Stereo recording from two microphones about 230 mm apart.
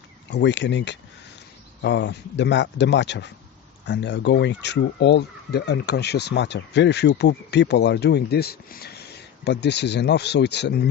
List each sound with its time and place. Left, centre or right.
0.3 s speech: left